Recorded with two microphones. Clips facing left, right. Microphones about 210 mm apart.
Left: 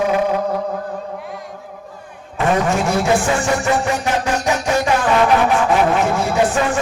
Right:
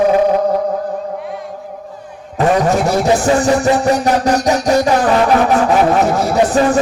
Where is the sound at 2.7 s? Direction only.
35° right (ahead or behind).